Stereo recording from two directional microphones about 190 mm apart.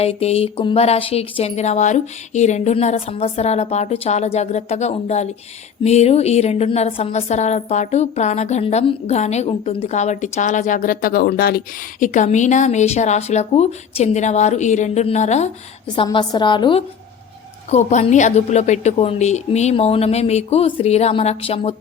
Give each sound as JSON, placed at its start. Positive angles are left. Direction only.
{"t": 0.0, "sound": "a woman's voice", "side_deg": 35}
{"t": 16.0, "sound": "a woman's voice", "side_deg": 25}
{"t": 17.7, "sound": "a woman's voice", "side_deg": 35}